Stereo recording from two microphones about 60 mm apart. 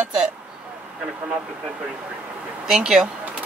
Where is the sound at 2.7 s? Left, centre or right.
Centre.